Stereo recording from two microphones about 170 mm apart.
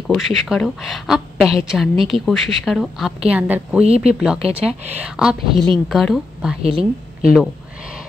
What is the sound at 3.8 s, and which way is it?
Speech, 35° right (ahead or behind).